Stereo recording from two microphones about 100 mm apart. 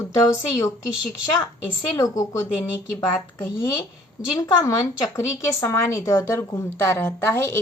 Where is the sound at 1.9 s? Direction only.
40° left (ahead or behind).